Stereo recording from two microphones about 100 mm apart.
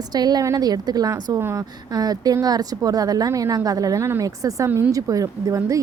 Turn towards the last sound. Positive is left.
turn(degrees=-35)  # may be behind; listen again after turning